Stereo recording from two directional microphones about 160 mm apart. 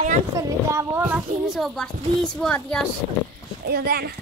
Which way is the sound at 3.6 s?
75° right (ahead or behind).